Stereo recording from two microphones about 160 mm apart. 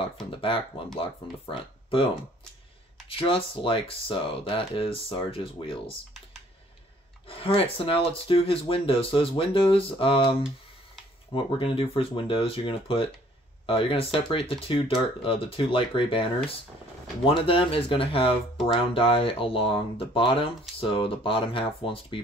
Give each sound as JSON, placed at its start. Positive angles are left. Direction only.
{"t": 0.9, "sound": "speech", "side_deg": 35}
{"t": 3.1, "sound": "speech", "side_deg": 35}
{"t": 7.2, "sound": "speech", "side_deg": 35}
{"t": 11.3, "sound": "speech", "side_deg": 35}
{"t": 17.5, "sound": "speech", "side_deg": 35}